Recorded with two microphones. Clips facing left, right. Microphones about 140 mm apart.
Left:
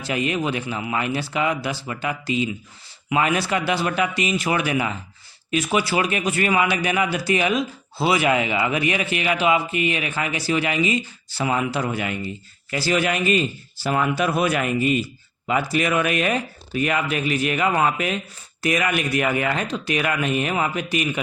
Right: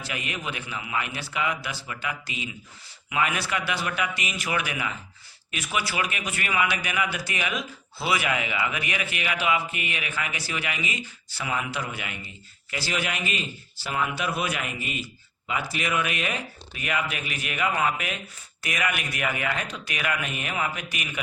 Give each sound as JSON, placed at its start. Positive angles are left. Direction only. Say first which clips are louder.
{"t": 0.0, "sound": "a man's voice", "louder": "left 10 dB", "side_deg": 30}